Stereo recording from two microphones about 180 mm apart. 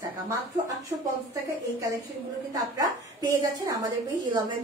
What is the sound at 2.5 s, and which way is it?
A woman's voice, 20° right (ahead or behind).